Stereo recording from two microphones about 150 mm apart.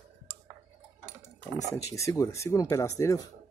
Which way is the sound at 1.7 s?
20° left (ahead or behind).